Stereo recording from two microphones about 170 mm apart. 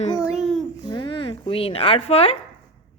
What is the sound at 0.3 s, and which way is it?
Babbling, 5° right (ahead or behind).